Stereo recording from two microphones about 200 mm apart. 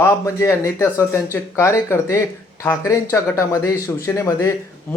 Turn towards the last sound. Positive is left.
turn(degrees=15)  # may be behind; listen again after turning